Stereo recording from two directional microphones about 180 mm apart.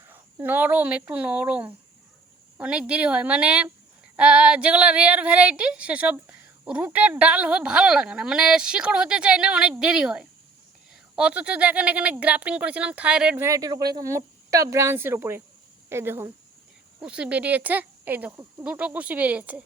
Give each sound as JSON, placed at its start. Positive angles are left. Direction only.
{"t": 0.1, "sound": "speech", "side_deg": -10}